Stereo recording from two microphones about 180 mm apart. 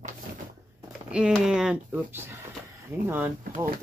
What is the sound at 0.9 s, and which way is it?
Speech, 5° right (ahead or behind).